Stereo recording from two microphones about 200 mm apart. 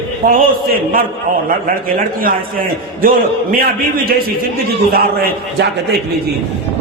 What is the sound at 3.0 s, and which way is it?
A man's voice, 45° right (ahead or behind).